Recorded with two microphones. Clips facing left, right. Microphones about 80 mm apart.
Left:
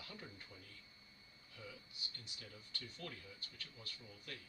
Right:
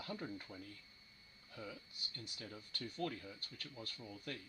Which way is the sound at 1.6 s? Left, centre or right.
Right.